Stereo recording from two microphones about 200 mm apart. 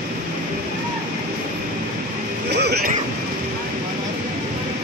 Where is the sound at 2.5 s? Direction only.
55° right (ahead or behind).